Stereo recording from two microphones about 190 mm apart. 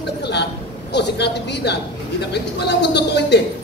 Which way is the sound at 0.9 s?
60° left (ahead or behind).